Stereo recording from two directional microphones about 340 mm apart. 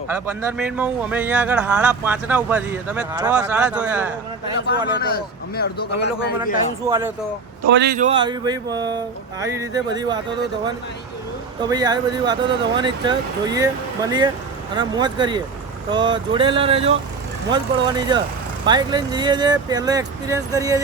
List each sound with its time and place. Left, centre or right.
0.5 s speech: centre
4.9 s speech: left
6.8 s speech: centre
7.7 s speech: right; by 10.2 s centre
11.6 s speech: centre